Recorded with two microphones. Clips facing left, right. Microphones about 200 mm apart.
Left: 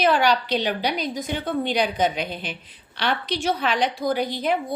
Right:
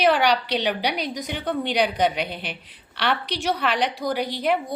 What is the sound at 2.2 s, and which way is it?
Speech, 45° left (ahead or behind).